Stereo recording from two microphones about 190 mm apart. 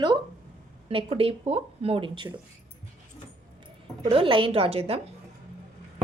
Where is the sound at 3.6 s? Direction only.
25° right (ahead or behind).